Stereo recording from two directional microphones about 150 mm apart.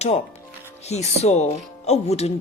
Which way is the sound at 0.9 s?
45° left (ahead or behind).